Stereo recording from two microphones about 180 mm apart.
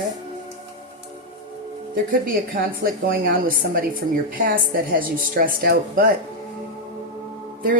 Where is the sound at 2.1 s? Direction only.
50° right (ahead or behind).